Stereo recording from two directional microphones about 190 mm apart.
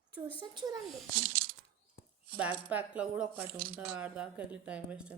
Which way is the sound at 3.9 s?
5° right (ahead or behind).